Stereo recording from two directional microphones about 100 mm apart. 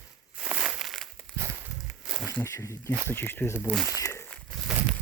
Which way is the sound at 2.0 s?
10° right (ahead or behind).